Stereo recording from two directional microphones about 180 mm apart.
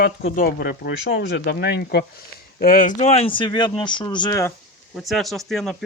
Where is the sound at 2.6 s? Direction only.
50° left (ahead or behind); by 4.4 s 25° left (ahead or behind).